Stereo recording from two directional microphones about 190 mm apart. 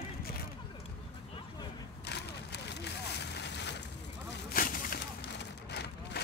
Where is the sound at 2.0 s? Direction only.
60° left (ahead or behind).